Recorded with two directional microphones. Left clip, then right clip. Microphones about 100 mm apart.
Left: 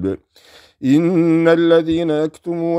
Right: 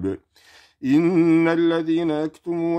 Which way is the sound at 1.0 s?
15° left (ahead or behind).